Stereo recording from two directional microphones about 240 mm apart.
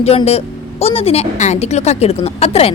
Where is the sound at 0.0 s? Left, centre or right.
Left.